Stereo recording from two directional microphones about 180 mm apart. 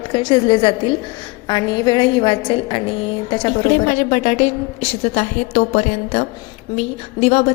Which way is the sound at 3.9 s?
45° left (ahead or behind).